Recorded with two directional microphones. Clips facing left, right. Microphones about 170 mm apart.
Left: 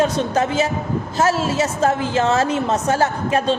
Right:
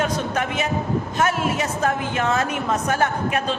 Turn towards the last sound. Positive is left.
turn(degrees=30)  # may be behind; listen again after turning